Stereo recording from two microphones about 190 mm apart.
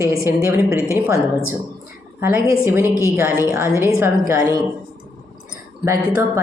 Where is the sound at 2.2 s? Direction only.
15° right (ahead or behind).